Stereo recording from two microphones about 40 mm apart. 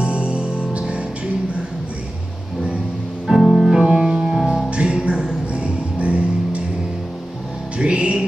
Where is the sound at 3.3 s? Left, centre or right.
Centre.